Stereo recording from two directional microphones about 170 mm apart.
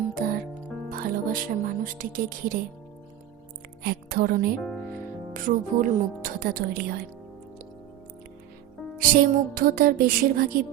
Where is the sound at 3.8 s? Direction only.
65° right (ahead or behind).